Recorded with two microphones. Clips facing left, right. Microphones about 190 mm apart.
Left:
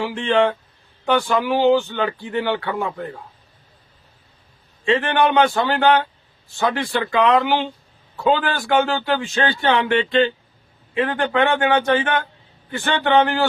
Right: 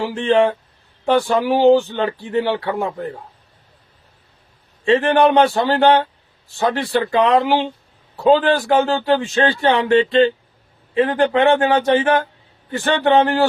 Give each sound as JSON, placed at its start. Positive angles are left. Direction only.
{"t": 0.0, "sound": "speech", "side_deg": -35}
{"t": 4.9, "sound": "speech", "side_deg": -35}